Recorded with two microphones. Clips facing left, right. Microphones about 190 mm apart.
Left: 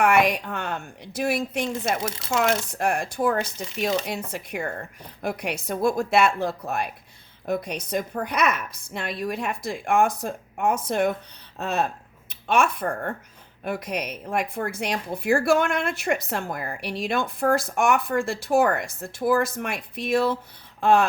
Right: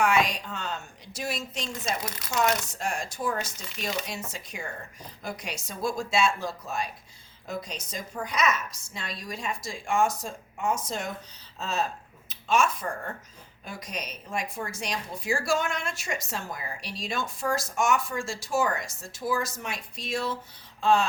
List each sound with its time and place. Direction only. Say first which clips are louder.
0.0 s a woman's voice: left 5 dB; 60° left (ahead or behind)
2.0 s speech: left 6 dB; 25° left (ahead or behind)
2.4 s a woman's voice: left 3 dB; 60° left (ahead or behind)